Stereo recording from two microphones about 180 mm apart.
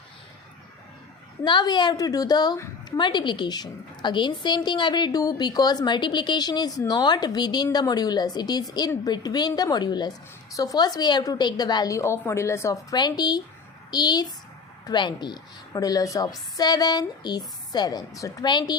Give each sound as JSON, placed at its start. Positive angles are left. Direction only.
{"t": 1.5, "sound": "a woman's voice", "side_deg": 25}